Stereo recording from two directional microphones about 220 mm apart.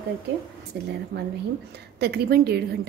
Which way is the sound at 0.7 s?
50° right (ahead or behind).